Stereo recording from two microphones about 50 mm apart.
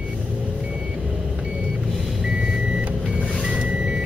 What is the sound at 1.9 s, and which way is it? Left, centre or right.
Reversing beeps, centre.